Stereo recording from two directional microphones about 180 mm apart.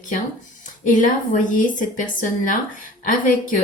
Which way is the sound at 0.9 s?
45° left (ahead or behind).